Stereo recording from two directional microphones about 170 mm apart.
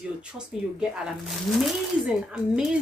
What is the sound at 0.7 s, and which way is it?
Speech, centre (ahead or behind).